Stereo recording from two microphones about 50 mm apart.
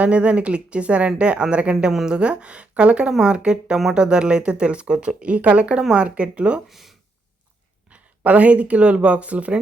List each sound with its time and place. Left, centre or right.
0.0 s speech: right
1.7 s a woman's voice: centre
2.1 s speech: right
6.7 s speech: centre
7.9 s speech: right